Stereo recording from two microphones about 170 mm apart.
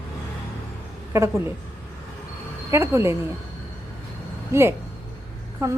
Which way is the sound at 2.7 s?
15° right (ahead or behind).